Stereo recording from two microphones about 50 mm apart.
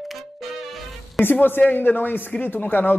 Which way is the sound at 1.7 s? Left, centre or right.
Left.